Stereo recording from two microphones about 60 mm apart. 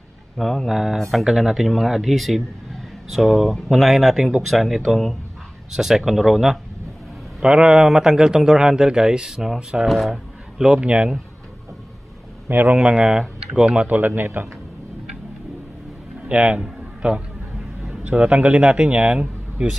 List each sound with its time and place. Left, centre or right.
0.4 s speech: centre
7.4 s a man's voice: centre
10.6 s a man's voice: centre
12.4 s a man's voice: right
12.7 s a man's voice: centre
13.8 s a man's voice: right
16.3 s speech: centre